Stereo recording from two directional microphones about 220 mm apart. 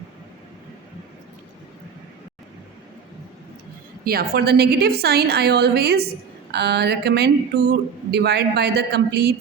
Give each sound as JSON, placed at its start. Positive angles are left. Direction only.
{"t": 4.0, "sound": "a woman's voice", "side_deg": -45}